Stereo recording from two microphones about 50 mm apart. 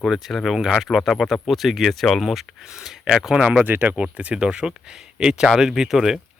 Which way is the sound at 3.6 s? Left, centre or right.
Right.